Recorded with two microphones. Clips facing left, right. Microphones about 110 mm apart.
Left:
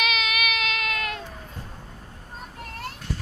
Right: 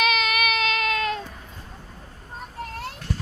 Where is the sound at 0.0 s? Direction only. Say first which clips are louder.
Right 4 dB; 40° right (ahead or behind).